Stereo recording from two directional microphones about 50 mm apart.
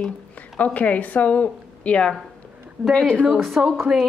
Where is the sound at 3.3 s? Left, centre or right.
Centre.